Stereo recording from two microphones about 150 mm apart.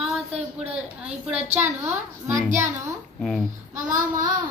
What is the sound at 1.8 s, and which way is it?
Speech, 15° right (ahead or behind).